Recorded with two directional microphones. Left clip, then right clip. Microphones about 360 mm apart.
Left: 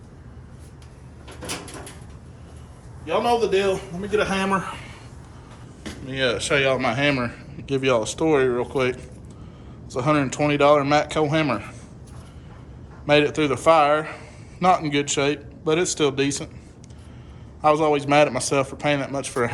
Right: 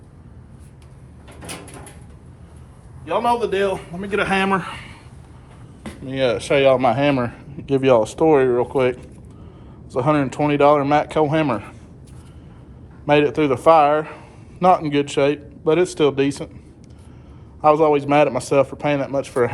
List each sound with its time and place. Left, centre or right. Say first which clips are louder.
3.2 s a man's voice: right 1 dB; centre
4.1 s a man's voice: right 3 dB; centre
13.1 s a man's voice: right 2 dB; centre
17.6 s a man's voice: right 4 dB; centre